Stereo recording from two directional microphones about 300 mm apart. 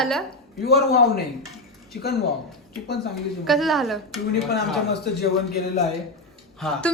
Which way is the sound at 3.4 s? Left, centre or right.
Centre.